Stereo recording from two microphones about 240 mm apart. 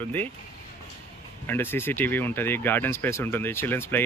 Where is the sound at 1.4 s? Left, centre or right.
Centre.